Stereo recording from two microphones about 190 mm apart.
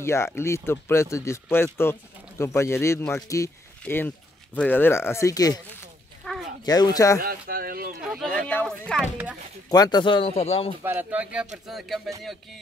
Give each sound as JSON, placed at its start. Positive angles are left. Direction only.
{"t": 0.0, "sound": "speech", "side_deg": 15}
{"t": 6.2, "sound": "a sound", "side_deg": 5}
{"t": 6.6, "sound": "speech", "side_deg": 20}
{"t": 7.2, "sound": "speech", "side_deg": -50}
{"t": 8.0, "sound": "speech", "side_deg": 0}
{"t": 9.7, "sound": "speech", "side_deg": 20}
{"t": 10.8, "sound": "speech", "side_deg": -10}